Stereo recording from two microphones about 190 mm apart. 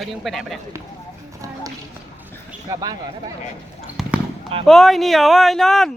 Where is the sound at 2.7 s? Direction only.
20° right (ahead or behind).